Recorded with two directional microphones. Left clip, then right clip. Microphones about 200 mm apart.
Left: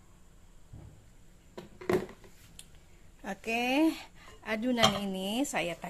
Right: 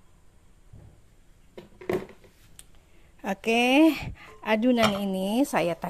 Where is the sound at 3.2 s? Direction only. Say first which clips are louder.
Right 9 dB; 40° right (ahead or behind).